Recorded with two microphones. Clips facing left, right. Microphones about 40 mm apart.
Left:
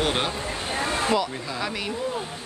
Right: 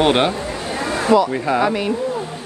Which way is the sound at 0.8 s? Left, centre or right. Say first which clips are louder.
Right 6 dB; right.